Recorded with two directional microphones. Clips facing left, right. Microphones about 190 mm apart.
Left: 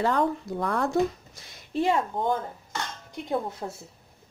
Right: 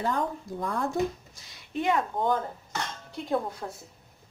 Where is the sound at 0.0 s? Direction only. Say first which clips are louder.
Left 5 dB; 75° left (ahead or behind).